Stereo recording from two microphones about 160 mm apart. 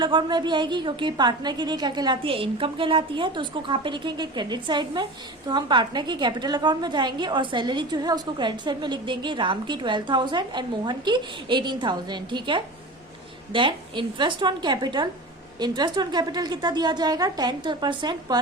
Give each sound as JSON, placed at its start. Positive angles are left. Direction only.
{"t": 0.0, "sound": "a woman's voice", "side_deg": -30}